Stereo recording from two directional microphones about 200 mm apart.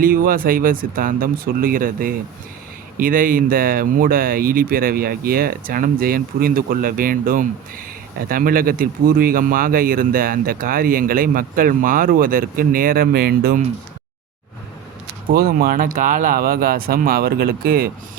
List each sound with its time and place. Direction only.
0.0 s speech: 45° right (ahead or behind)
15.3 s speech: 50° right (ahead or behind)